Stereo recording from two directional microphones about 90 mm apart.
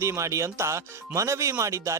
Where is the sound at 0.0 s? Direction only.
35° right (ahead or behind).